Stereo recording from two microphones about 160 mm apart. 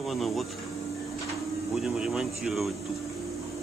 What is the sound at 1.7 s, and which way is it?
Speech, 5° right (ahead or behind).